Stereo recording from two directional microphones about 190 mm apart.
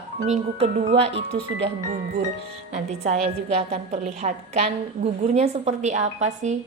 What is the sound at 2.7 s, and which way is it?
A woman's voice, 35° right (ahead or behind).